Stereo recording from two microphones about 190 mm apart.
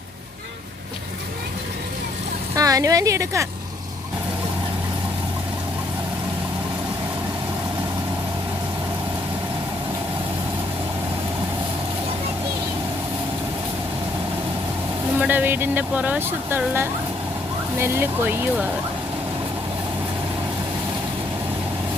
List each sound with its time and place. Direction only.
2.6 s a woman's voice: 20° right (ahead or behind)
15.2 s speech: 10° right (ahead or behind)